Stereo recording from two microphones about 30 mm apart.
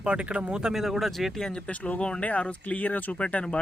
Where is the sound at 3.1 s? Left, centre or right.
Left.